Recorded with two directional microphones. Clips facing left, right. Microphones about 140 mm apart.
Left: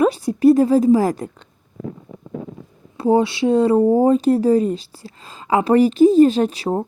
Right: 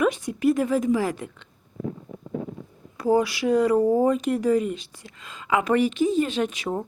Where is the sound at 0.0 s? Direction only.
35° left (ahead or behind).